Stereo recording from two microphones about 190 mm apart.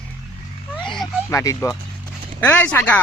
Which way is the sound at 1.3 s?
15° left (ahead or behind).